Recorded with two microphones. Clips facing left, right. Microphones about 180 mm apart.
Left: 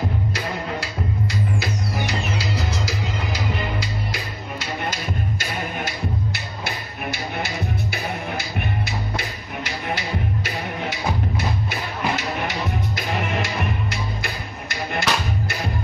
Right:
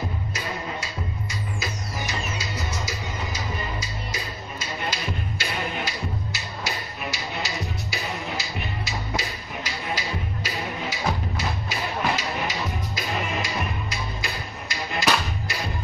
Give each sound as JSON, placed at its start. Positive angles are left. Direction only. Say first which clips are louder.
{"t": 1.6, "sound": "music", "louder": "left 6 dB", "side_deg": 65}
{"t": 4.8, "sound": "music", "louder": "left 1 dB", "side_deg": 50}